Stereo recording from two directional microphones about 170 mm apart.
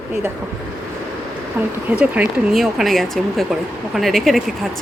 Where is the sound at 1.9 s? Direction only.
5° right (ahead or behind).